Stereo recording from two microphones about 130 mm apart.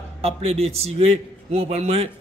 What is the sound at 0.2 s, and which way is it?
A man's voice, 50° right (ahead or behind).